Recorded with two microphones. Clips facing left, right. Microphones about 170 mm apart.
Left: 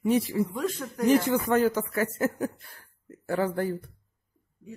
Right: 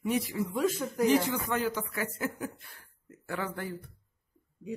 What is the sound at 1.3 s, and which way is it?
Speech, 45° left (ahead or behind).